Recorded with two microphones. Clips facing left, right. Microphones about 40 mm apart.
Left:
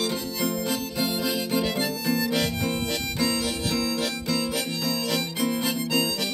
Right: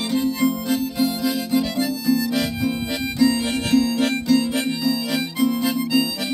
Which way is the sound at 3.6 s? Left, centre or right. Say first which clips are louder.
Right 11 dB; right.